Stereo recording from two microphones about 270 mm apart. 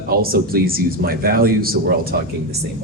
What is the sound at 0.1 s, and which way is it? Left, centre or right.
Speech, right.